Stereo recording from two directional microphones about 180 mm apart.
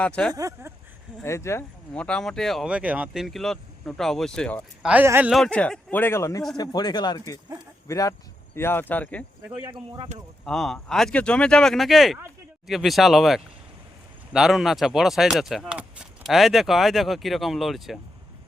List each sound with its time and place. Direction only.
0.0 s speech: 5° left (ahead or behind)
0.3 s speech: 20° right (ahead or behind)
1.2 s speech: 15° left (ahead or behind)
4.9 s speech: 10° right (ahead or behind)
5.3 s speech: 5° left (ahead or behind)
9.5 s speech: 5° right (ahead or behind)